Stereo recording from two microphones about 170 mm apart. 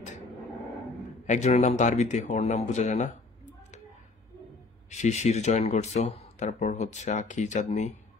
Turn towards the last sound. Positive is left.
turn(degrees=45)  # may be behind; listen again after turning